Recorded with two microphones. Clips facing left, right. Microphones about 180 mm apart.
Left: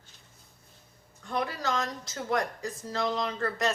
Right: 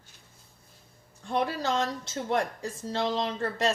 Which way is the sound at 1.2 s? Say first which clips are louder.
Right 3 dB; 30° right (ahead or behind).